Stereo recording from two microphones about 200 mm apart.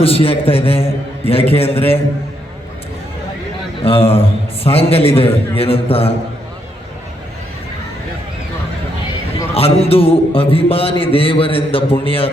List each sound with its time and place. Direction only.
0.0 s a man's voice: 30° left (ahead or behind)
3.8 s a man's voice: 30° left (ahead or behind)
9.6 s a man's voice: 30° left (ahead or behind)